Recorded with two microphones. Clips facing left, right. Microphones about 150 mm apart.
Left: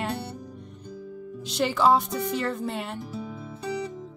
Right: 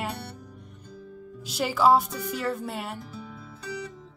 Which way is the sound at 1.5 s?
5° right (ahead or behind).